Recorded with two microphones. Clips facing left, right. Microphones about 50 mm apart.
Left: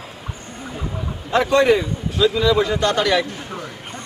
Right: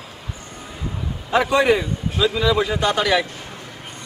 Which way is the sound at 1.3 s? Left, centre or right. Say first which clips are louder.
Left 1 dB; centre.